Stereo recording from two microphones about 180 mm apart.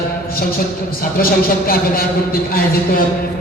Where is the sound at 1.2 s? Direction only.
55° left (ahead or behind).